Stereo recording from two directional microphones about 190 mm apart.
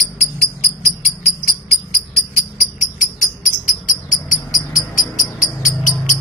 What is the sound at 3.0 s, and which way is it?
Cricket, 45° left (ahead or behind).